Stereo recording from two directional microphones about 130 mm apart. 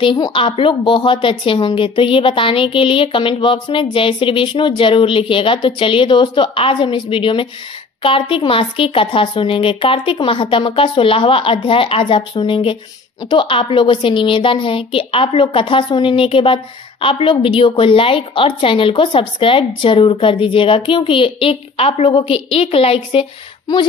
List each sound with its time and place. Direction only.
0.0 s a woman's voice: 40° left (ahead or behind)